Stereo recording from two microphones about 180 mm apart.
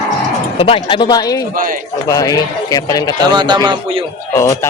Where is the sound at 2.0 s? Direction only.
20° left (ahead or behind).